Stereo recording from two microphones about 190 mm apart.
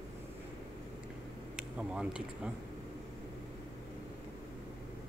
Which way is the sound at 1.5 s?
5° right (ahead or behind).